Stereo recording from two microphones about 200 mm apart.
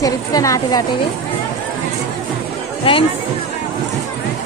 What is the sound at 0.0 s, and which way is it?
Speech, 15° left (ahead or behind).